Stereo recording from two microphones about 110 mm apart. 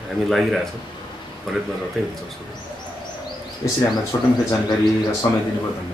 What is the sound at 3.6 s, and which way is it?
Speech, 35° left (ahead or behind).